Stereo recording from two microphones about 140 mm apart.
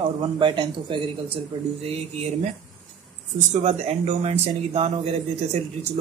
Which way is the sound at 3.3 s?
55° right (ahead or behind).